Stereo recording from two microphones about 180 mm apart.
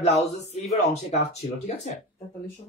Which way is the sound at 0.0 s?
40° left (ahead or behind).